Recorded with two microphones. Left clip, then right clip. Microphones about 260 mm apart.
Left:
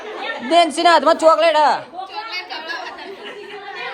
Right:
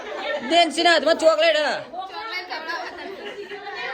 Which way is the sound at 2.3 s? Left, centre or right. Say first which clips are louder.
Left 2 dB; right.